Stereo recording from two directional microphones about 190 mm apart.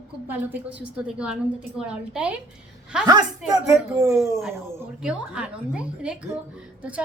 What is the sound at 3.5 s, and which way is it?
A woman's voice, 15° right (ahead or behind).